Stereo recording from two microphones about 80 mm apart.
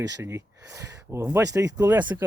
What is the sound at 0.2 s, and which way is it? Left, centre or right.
Speech, right.